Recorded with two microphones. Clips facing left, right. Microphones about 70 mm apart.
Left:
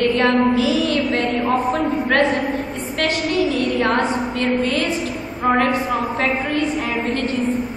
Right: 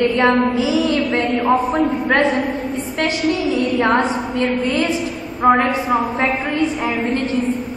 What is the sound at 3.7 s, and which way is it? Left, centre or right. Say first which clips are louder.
Speech: right 2 dB; centre.